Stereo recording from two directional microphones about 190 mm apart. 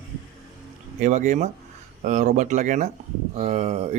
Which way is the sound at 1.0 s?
40° right (ahead or behind).